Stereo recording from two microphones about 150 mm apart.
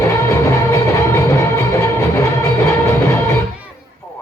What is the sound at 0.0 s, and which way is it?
Music, 20° left (ahead or behind).